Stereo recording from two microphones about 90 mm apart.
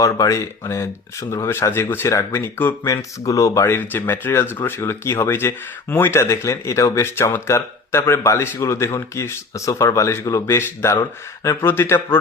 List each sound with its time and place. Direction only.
0.0 s speech: 40° left (ahead or behind)
3.7 s speech: 25° left (ahead or behind)